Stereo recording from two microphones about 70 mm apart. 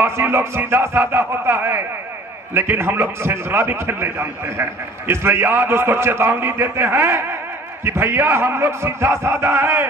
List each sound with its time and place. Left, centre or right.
0.0 s a man's voice: right